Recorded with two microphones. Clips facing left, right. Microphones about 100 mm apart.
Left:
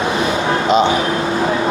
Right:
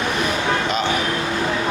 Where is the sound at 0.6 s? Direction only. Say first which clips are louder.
Left 7 dB; 30° left (ahead or behind).